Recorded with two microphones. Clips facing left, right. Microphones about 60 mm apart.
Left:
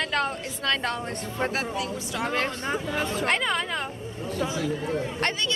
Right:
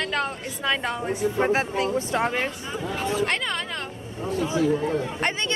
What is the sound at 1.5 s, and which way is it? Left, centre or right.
Speech, right.